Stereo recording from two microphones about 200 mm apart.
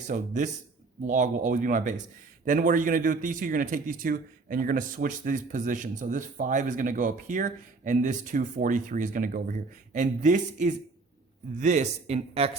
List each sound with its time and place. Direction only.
0.1 s a man's voice: 40° right (ahead or behind)